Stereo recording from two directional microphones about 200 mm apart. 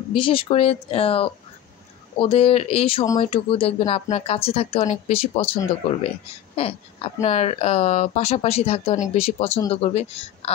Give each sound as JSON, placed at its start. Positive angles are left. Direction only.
{"t": 0.1, "sound": "speech", "side_deg": 25}